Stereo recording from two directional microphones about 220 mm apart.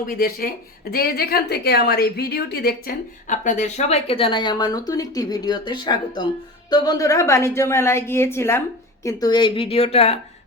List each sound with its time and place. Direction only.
0.1 s a woman's voice: 40° left (ahead or behind)